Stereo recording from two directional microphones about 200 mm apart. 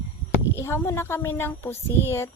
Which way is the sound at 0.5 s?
15° left (ahead or behind).